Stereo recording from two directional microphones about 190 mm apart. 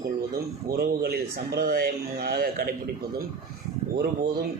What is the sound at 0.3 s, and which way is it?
A man's voice, 55° right (ahead or behind).